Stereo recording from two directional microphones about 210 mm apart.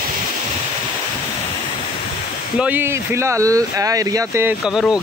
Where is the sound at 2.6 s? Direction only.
10° right (ahead or behind).